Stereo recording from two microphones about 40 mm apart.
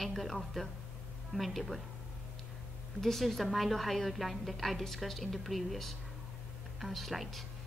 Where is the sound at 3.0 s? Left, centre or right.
Centre.